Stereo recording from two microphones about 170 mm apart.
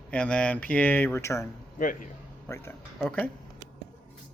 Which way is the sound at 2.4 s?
15° left (ahead or behind).